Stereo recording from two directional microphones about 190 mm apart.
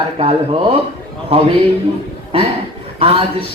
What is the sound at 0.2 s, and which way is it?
Speech, 30° right (ahead or behind).